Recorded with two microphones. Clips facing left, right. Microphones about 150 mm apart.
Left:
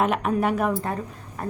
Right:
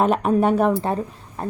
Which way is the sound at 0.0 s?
35° right (ahead or behind).